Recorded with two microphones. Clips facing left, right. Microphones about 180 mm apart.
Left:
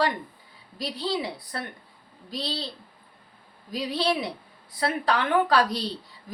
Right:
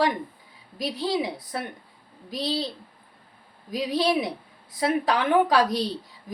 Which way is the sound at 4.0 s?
15° right (ahead or behind).